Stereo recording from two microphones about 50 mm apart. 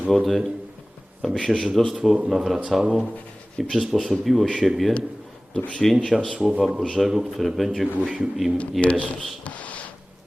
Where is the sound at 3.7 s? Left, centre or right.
Centre.